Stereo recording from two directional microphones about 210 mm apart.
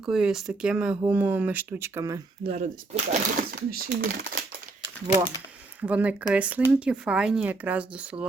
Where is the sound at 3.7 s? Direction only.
40° right (ahead or behind).